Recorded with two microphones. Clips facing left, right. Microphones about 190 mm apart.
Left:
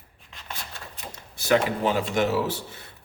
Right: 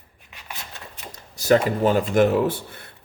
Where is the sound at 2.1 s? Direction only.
55° right (ahead or behind).